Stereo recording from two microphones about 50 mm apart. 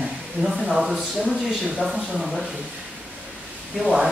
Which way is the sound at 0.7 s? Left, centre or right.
Centre.